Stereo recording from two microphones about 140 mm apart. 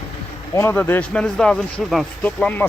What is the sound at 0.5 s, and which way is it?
A man's voice, 15° left (ahead or behind).